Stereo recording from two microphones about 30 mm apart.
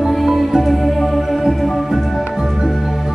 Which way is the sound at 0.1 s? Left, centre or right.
Centre.